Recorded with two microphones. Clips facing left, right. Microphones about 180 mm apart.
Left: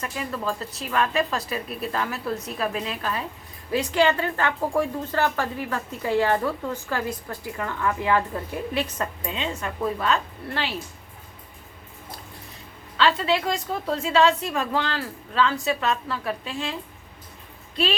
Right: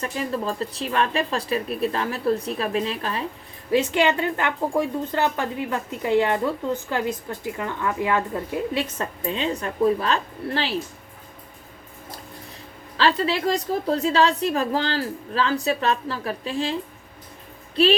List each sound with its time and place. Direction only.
0.0 s a woman's voice: 35° right (ahead or behind)
13.0 s a woman's voice: 35° right (ahead or behind)